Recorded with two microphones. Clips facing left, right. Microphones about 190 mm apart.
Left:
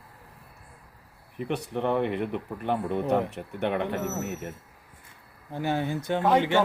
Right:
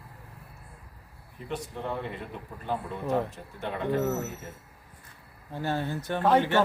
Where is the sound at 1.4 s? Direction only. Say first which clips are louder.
Left 6 dB; 65° left (ahead or behind).